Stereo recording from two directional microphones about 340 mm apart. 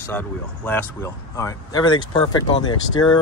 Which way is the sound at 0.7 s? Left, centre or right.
Centre.